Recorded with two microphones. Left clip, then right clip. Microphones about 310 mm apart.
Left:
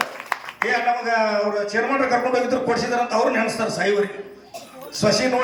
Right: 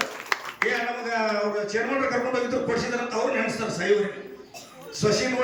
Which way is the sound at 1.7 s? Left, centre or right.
Centre.